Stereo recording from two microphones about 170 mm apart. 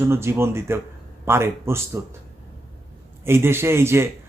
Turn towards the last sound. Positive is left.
turn(degrees=-15)  # may be behind; listen again after turning